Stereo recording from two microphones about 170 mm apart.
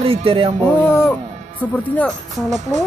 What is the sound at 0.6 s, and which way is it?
Music, 15° left (ahead or behind).